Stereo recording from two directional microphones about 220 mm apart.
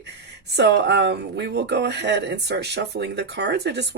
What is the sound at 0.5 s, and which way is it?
Speech, 50° right (ahead or behind).